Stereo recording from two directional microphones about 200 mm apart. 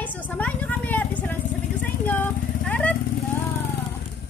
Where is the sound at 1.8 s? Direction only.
10° left (ahead or behind).